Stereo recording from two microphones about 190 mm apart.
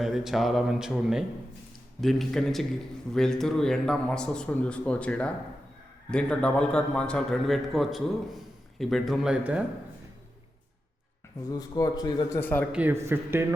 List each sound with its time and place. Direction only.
0.0 s a man's voice: centre (ahead or behind)
11.4 s a man's voice: 20° left (ahead or behind)
12.7 s speech: 10° right (ahead or behind)